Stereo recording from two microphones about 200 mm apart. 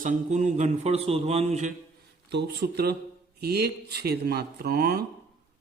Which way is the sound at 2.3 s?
55° right (ahead or behind).